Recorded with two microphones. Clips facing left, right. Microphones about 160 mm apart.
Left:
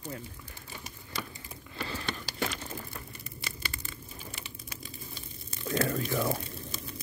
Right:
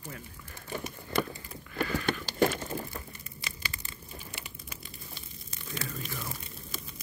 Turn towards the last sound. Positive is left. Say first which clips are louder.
# left 10 dB
turn(degrees=65)  # may be behind; listen again after turning